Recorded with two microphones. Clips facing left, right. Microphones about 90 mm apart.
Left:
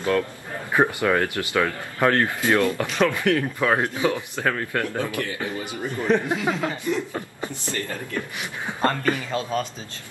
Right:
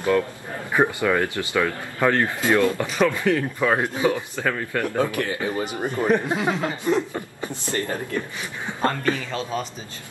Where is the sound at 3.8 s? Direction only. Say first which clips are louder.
Right 1 dB; 20° right (ahead or behind).